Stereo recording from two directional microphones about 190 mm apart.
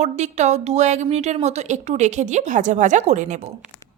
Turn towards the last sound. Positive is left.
turn(degrees=-40)  # may be behind; listen again after turning